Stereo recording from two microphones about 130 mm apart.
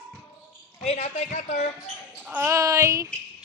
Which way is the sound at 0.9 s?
65° left (ahead or behind).